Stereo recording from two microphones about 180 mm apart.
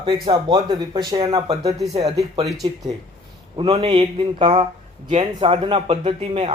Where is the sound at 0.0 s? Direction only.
25° right (ahead or behind).